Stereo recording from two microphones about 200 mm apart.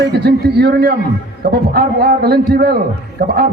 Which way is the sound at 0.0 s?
55° right (ahead or behind).